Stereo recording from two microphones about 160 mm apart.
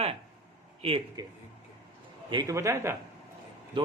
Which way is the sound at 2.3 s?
20° right (ahead or behind).